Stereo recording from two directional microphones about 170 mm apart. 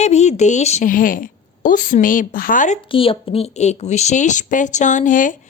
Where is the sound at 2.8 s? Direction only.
30° left (ahead or behind).